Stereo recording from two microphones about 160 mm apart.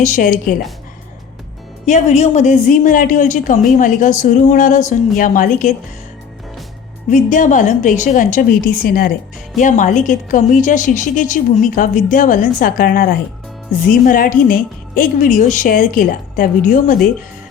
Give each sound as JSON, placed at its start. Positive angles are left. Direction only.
{"t": 0.0, "sound": "a woman's voice", "side_deg": 55}
{"t": 1.9, "sound": "a woman's voice", "side_deg": 45}
{"t": 7.1, "sound": "a woman's voice", "side_deg": 50}
{"t": 9.6, "sound": "a woman's voice", "side_deg": 50}